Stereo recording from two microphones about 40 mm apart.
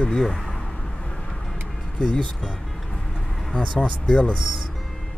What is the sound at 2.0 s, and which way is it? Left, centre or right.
Speech, left.